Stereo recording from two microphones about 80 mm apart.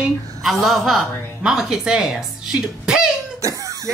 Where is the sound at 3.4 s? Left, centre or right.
Right.